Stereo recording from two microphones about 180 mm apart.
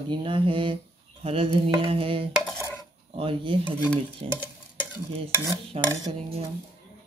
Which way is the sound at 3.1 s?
30° right (ahead or behind).